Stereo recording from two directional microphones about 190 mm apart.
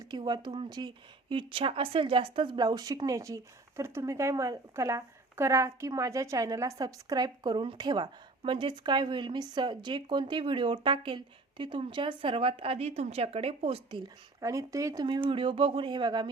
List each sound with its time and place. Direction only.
0.0 s speech: 20° right (ahead or behind)
14.4 s speech: 15° right (ahead or behind)